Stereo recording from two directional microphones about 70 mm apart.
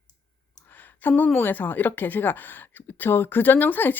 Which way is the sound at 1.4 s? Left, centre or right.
Left.